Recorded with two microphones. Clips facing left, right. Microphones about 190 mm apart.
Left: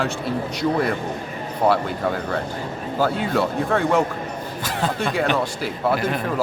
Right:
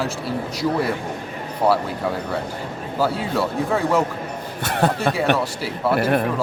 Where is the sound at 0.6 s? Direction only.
5° right (ahead or behind).